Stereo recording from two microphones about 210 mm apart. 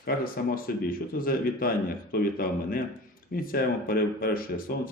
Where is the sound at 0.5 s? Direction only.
45° left (ahead or behind).